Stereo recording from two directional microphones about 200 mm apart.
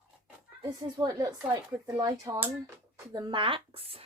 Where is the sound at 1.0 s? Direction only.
20° right (ahead or behind).